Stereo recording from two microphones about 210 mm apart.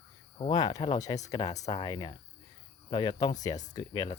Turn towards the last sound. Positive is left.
turn(degrees=20)  # may be behind; listen again after turning